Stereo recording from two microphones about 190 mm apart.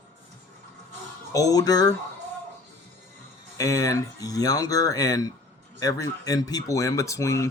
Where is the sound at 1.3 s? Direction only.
20° left (ahead or behind).